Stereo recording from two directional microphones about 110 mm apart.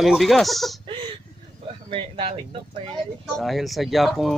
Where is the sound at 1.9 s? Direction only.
60° right (ahead or behind).